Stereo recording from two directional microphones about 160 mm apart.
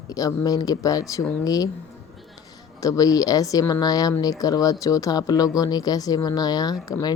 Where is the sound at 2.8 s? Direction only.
20° left (ahead or behind).